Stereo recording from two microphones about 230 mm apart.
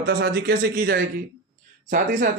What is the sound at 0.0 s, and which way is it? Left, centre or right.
Speech, right.